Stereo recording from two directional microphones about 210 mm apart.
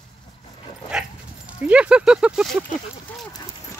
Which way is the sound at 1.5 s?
5° right (ahead or behind).